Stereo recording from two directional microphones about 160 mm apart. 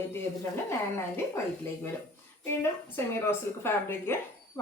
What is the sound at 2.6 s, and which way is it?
A woman's voice, 15° left (ahead or behind).